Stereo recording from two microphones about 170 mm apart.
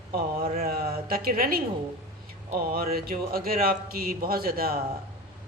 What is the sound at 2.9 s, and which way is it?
A woman's voice, 60° right (ahead or behind).